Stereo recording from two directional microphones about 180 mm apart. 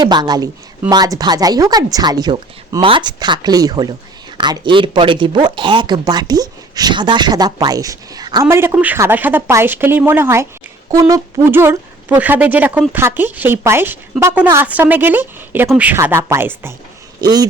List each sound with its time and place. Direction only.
0.0 s speech: 25° right (ahead or behind)